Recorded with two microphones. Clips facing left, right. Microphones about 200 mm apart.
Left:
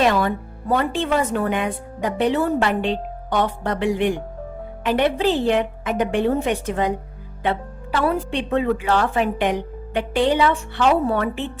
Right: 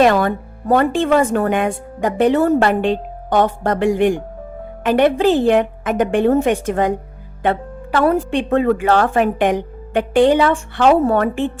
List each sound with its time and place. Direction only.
0.0 s speech: 55° right (ahead or behind)